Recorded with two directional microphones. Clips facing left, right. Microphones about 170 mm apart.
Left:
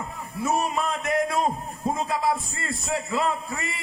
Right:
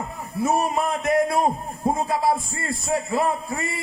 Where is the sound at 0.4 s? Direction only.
35° right (ahead or behind).